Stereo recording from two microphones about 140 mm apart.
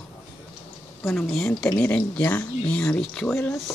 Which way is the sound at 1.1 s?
Centre (ahead or behind).